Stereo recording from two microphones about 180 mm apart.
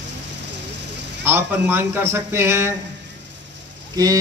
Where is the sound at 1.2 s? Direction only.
10° right (ahead or behind).